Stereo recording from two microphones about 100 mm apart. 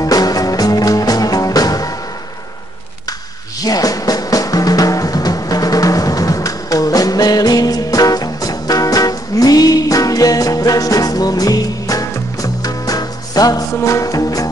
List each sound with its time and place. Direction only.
0.0 s music: 40° left (ahead or behind)
3.6 s music: 40° left (ahead or behind)